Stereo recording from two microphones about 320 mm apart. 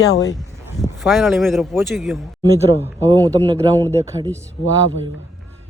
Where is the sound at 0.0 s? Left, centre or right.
Left.